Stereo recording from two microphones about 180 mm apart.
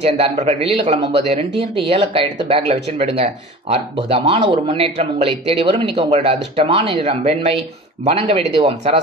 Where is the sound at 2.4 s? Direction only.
35° right (ahead or behind).